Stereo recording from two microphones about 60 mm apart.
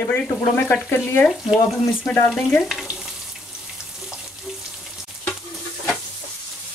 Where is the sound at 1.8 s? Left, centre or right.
Left.